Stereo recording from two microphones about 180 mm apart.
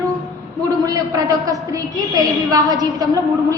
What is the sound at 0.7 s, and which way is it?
A woman's voice, 20° right (ahead or behind).